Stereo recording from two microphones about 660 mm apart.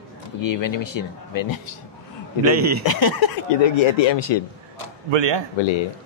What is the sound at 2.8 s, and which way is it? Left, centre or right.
Speech, left.